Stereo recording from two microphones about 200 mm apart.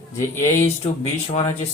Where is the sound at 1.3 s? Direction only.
30° left (ahead or behind).